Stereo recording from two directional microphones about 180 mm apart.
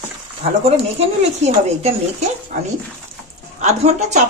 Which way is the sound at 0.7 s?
35° right (ahead or behind).